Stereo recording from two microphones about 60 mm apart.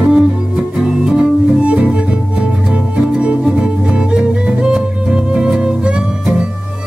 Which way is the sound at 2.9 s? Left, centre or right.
Centre.